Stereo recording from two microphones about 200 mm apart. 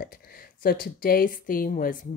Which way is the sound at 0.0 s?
45° left (ahead or behind).